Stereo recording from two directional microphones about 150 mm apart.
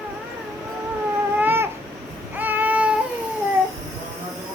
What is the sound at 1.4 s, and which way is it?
Babbling, 15° right (ahead or behind).